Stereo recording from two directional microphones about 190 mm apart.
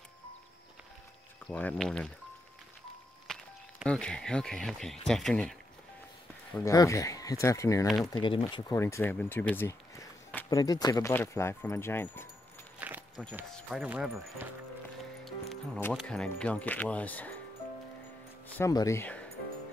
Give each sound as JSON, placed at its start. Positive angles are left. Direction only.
{"t": 1.5, "sound": "speech", "side_deg": 5}
{"t": 3.3, "sound": "music", "side_deg": 5}
{"t": 3.8, "sound": "speech", "side_deg": 5}
{"t": 6.6, "sound": "speech", "side_deg": 15}
{"t": 12.7, "sound": "a sound", "side_deg": -10}
{"t": 13.3, "sound": "speech", "side_deg": -5}
{"t": 15.2, "sound": "music", "side_deg": 0}
{"t": 15.9, "sound": "speech", "side_deg": 0}
{"t": 18.6, "sound": "speech", "side_deg": 20}